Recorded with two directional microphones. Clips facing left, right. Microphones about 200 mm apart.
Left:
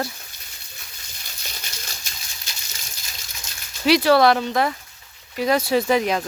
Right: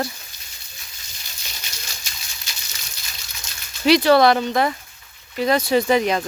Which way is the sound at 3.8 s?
5° left (ahead or behind).